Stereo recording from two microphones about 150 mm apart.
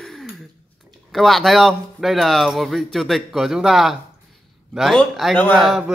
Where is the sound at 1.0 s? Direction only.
Centre (ahead or behind).